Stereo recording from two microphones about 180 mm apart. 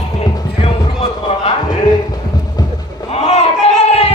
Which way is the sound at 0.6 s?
40° left (ahead or behind).